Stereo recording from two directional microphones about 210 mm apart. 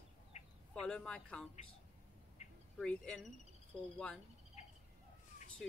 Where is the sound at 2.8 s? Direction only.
5° left (ahead or behind).